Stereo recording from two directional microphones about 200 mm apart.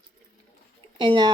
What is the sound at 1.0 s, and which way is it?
Speech, 20° right (ahead or behind).